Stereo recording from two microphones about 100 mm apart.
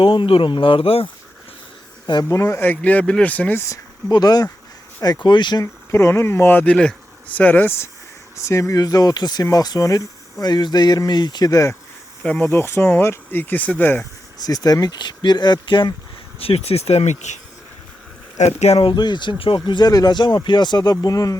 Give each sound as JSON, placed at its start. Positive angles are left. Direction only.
{"t": 0.0, "sound": "speech", "side_deg": 60}
{"t": 2.2, "sound": "speech", "side_deg": 30}
{"t": 2.6, "sound": "speech", "side_deg": 15}
{"t": 4.1, "sound": "speech", "side_deg": 40}
{"t": 5.9, "sound": "speech", "side_deg": 30}
{"t": 12.4, "sound": "speech", "side_deg": 25}
{"t": 14.4, "sound": "speech", "side_deg": 40}
{"t": 16.4, "sound": "speech", "side_deg": 80}
{"t": 18.4, "sound": "speech", "side_deg": 90}
{"t": 18.9, "sound": "speech", "side_deg": 50}